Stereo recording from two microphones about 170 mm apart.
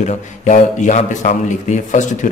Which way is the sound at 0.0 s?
45° left (ahead or behind).